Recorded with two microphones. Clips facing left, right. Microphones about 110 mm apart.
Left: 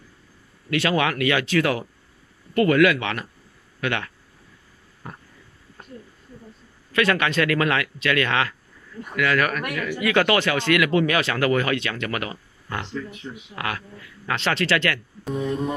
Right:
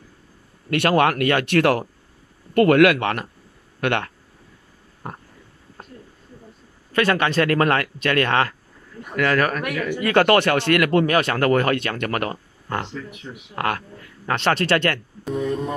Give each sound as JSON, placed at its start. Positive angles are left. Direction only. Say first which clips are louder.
{"t": 0.7, "sound": "speech", "louder": "right 4 dB", "side_deg": -55}
{"t": 3.0, "sound": "speech", "louder": "right 5 dB", "side_deg": -50}
{"t": 5.0, "sound": "a sound", "louder": "right 5 dB", "side_deg": -50}
{"t": 7.0, "sound": "speech", "louder": "right 2 dB", "side_deg": -35}
{"t": 9.6, "sound": "speech", "louder": "right 3 dB", "side_deg": 0}
{"t": 9.9, "sound": "speech", "louder": "right 4 dB", "side_deg": -45}